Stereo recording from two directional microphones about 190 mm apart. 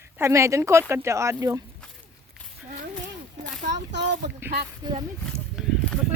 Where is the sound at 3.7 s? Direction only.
65° right (ahead or behind).